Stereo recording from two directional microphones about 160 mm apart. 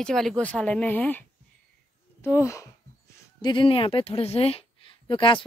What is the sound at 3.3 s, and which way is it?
Speech, 30° left (ahead or behind).